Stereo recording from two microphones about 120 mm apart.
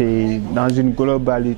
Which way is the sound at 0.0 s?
10° right (ahead or behind).